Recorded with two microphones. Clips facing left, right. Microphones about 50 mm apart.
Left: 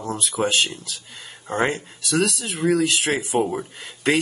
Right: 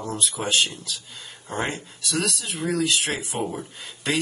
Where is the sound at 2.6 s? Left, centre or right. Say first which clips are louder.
Left 7 dB; left.